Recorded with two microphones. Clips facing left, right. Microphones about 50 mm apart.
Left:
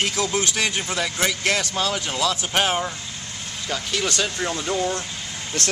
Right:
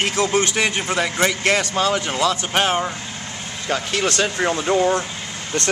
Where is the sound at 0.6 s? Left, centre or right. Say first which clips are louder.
Right 4 dB; right.